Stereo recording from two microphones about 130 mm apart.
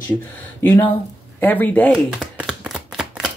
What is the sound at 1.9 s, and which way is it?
Shuffling cards, 5° right (ahead or behind).